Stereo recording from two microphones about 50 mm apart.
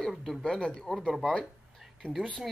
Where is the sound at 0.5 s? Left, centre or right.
Centre.